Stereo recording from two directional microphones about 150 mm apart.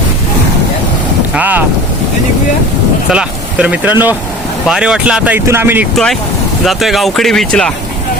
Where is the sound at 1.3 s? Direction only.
10° right (ahead or behind).